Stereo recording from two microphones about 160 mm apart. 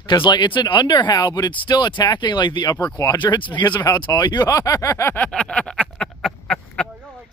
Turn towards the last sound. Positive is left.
turn(degrees=5)  # may be behind; listen again after turning